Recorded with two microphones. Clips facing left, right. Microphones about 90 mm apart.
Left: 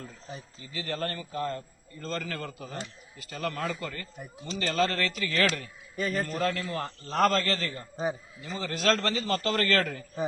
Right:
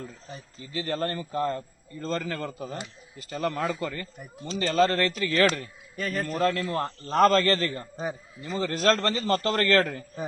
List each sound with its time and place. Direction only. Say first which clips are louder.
0.7 s a man's voice: right 4 dB; 30° right (ahead or behind)
6.0 s a man's voice: even; centre (ahead or behind)
6.3 s a man's voice: right 4 dB; 35° right (ahead or behind)
7.1 s a man's voice: right 5 dB; 50° right (ahead or behind)